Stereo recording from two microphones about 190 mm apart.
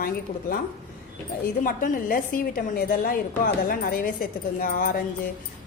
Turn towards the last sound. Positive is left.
turn(degrees=45)  # may be behind; listen again after turning